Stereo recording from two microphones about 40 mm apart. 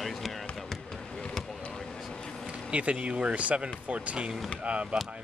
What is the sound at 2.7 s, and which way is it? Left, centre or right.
Speech, right.